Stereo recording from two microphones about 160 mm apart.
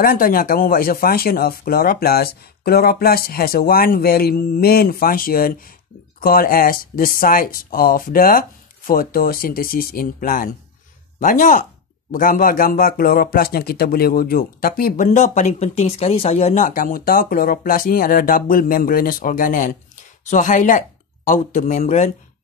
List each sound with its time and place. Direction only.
0.0 s speech: 65° left (ahead or behind); by 22.1 s 50° left (ahead or behind)